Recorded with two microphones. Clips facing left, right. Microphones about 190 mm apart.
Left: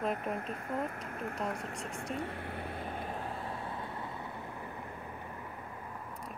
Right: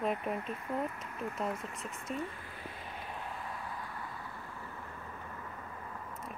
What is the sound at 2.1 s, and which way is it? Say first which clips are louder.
Vehicle: left 1 dB; 65° left (ahead or behind).